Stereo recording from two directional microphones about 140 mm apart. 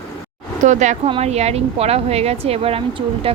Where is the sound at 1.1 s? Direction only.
50° right (ahead or behind).